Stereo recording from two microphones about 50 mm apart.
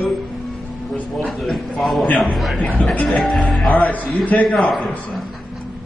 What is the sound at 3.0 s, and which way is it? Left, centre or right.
Speech, centre.